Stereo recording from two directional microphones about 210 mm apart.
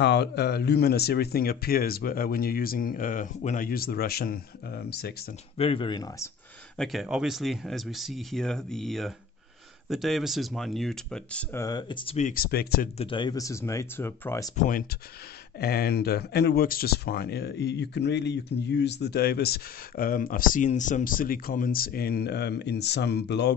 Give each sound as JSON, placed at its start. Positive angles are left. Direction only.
{"t": 0.0, "sound": "speech", "side_deg": 55}
{"t": 5.6, "sound": "speech", "side_deg": 25}
{"t": 6.8, "sound": "speech", "side_deg": 0}
{"t": 11.6, "sound": "speech", "side_deg": 20}
{"t": 12.9, "sound": "speech", "side_deg": 25}
{"t": 15.6, "sound": "speech", "side_deg": 45}